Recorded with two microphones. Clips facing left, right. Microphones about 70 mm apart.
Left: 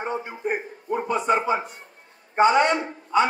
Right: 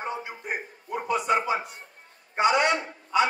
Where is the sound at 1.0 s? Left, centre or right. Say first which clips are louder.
Left 2 dB; left.